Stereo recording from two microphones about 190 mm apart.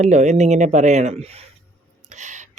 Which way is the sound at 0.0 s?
40° right (ahead or behind).